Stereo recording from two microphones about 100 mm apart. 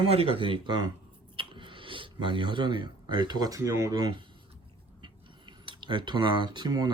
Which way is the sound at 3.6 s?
30° right (ahead or behind).